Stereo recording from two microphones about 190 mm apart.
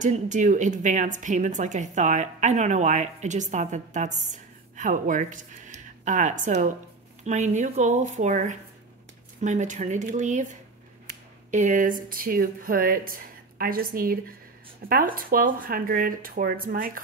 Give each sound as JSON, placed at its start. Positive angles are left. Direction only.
{"t": 0.0, "sound": "a woman's voice", "side_deg": -40}
{"t": 11.5, "sound": "speech", "side_deg": -40}